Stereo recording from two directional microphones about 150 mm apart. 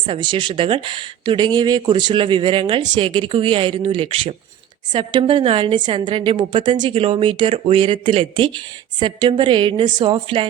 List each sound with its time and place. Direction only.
0.0 s speech: 35° right (ahead or behind)